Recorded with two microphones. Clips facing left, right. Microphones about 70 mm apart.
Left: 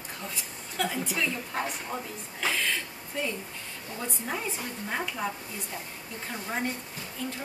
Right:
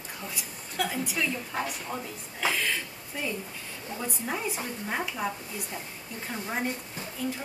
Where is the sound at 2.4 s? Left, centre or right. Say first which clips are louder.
Right 1 dB; centre.